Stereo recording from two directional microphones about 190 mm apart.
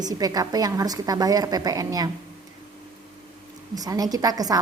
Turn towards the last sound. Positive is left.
turn(degrees=-20)  # may be behind; listen again after turning